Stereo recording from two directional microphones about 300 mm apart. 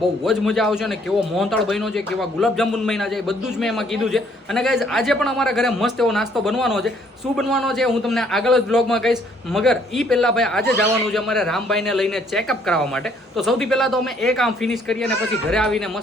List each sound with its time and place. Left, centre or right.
0.3 s a man's voice: centre